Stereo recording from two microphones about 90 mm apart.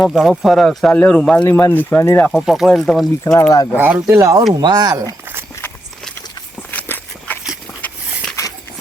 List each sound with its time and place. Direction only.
0.0 s speech: centre (ahead or behind)
0.9 s speech: 15° left (ahead or behind)
1.5 s speech: 25° left (ahead or behind)
2.3 s speech: 5° right (ahead or behind)
3.5 s speech: 45° left (ahead or behind)
3.8 s speech: 20° right (ahead or behind)
4.0 s speech: 35° right (ahead or behind)
4.6 s speech: 50° right (ahead or behind)
6.7 s walk: 25° left (ahead or behind)